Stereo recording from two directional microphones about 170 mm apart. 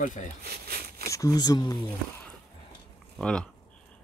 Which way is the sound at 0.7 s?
65° right (ahead or behind).